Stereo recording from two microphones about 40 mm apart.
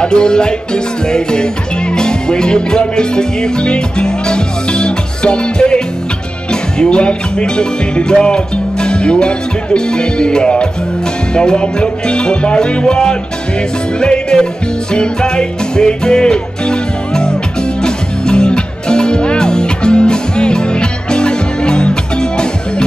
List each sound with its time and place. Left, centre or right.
0.0 s music: left